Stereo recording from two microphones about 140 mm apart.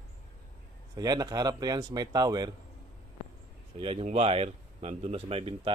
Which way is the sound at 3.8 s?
45° right (ahead or behind).